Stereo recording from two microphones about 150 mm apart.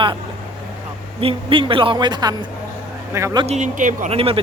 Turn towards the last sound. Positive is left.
turn(degrees=-55)  # may be behind; listen again after turning